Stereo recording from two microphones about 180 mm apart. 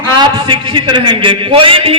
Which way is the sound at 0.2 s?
25° right (ahead or behind).